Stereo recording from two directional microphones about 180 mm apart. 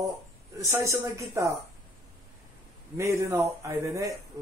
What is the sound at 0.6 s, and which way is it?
Speech, 15° right (ahead or behind).